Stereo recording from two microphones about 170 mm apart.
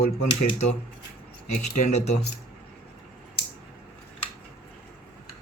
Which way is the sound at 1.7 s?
45° left (ahead or behind).